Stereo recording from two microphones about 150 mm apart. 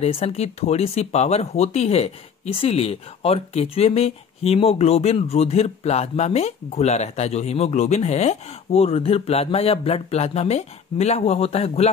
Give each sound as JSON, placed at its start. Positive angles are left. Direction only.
{"t": 0.0, "sound": "speech", "side_deg": 45}